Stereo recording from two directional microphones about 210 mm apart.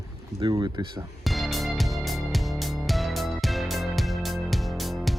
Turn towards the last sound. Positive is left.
turn(degrees=0)  # may be behind; listen again after turning